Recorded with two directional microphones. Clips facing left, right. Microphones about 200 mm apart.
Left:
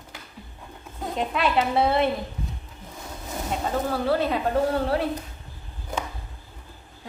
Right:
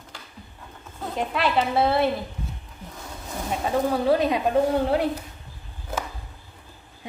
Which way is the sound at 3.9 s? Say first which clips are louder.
Right 2 dB; 15° right (ahead or behind).